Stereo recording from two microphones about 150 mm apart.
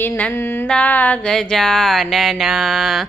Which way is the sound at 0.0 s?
10° left (ahead or behind).